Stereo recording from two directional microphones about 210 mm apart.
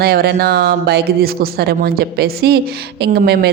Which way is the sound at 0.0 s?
50° right (ahead or behind).